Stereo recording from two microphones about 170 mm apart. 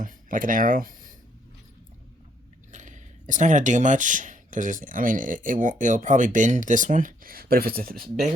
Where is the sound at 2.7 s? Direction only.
45° right (ahead or behind).